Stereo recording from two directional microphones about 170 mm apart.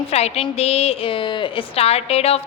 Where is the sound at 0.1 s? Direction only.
40° left (ahead or behind).